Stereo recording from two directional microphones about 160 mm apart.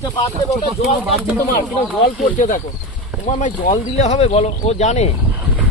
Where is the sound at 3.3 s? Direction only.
50° left (ahead or behind).